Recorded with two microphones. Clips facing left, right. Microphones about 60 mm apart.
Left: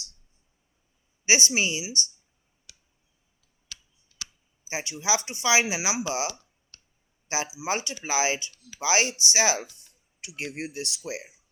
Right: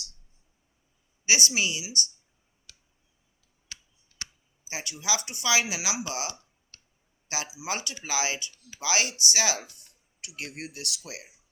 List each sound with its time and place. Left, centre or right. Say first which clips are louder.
1.2 s speech: left 2 dB; left
4.1 s clicking: right 1 dB; right
4.7 s speech: left 4 dB; left